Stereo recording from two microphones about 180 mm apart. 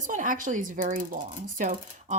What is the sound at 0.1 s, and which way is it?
Speech, 45° right (ahead or behind).